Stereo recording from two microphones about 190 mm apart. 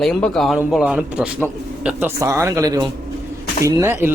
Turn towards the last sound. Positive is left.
turn(degrees=-10)  # may be behind; listen again after turning